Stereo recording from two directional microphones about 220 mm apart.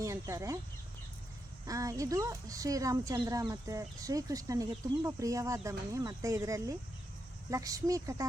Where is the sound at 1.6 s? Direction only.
15° right (ahead or behind).